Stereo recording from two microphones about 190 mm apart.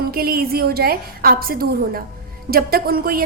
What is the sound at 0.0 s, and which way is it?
A woman's voice, 50° right (ahead or behind).